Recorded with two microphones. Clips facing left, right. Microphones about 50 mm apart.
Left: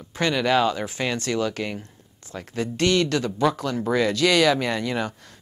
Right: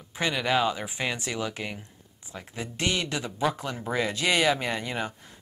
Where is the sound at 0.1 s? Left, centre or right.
Centre.